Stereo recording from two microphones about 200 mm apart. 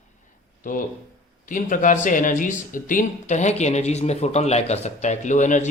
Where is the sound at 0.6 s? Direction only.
40° left (ahead or behind).